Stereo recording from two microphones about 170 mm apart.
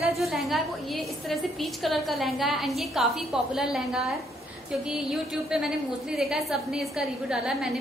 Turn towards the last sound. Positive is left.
turn(degrees=-5)  # may be behind; listen again after turning